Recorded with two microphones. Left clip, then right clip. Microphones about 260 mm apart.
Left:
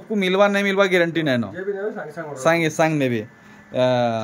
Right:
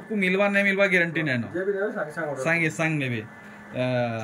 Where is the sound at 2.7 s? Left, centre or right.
Centre.